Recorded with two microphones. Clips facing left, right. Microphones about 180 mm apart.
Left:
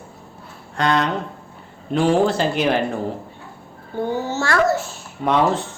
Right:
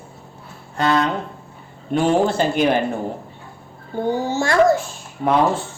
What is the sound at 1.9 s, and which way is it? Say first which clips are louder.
Speech: even; centre (ahead or behind).